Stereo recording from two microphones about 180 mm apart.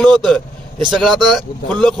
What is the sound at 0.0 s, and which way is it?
Speech, centre (ahead or behind).